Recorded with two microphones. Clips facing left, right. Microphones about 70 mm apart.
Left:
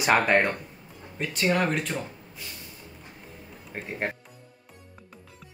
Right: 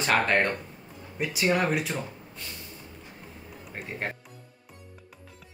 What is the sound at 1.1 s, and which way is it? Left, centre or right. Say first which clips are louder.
Speech: even; centre.